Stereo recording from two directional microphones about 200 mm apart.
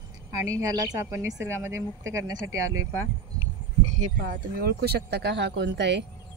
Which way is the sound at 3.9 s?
40° right (ahead or behind).